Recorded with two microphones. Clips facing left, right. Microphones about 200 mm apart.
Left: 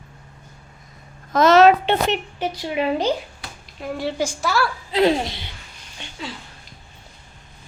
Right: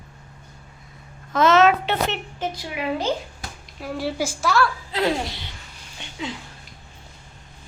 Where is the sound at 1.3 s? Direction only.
40° left (ahead or behind).